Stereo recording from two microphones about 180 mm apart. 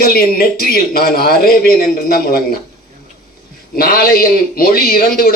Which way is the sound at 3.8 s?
55° left (ahead or behind).